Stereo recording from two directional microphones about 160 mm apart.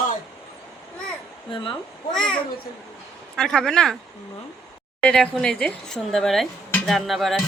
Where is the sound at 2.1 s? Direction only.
5° left (ahead or behind).